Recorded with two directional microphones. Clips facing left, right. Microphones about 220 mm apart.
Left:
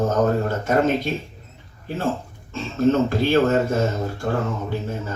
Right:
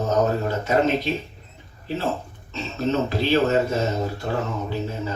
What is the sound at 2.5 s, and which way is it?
A man's voice, 50° left (ahead or behind).